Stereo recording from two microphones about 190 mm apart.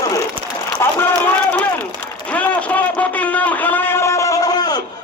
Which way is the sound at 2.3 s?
5° left (ahead or behind).